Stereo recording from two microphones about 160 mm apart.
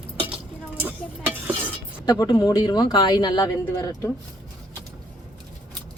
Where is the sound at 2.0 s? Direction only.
25° left (ahead or behind).